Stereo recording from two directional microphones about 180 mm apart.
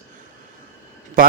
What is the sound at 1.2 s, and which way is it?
Speech, 50° right (ahead or behind).